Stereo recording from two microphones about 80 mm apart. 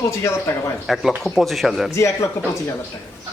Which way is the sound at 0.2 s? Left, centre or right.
Left.